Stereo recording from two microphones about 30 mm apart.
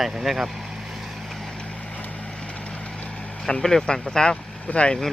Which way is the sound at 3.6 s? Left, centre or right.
Centre.